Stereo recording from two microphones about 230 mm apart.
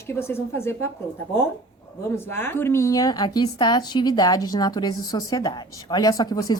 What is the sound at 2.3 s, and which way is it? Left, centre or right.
A woman's voice, centre.